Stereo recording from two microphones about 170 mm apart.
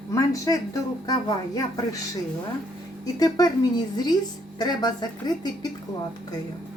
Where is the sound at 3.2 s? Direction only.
20° left (ahead or behind).